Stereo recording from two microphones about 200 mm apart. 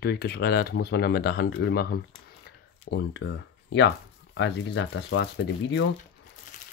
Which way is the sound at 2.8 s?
65° left (ahead or behind).